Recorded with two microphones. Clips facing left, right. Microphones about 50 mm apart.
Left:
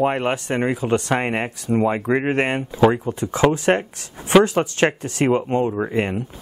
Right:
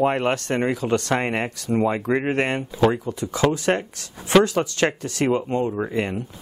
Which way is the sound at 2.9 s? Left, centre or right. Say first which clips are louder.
Left 3 dB; left.